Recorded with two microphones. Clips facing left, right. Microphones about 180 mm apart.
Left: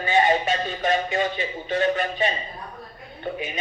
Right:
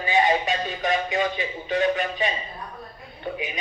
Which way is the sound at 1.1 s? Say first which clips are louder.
Even; 40° left (ahead or behind).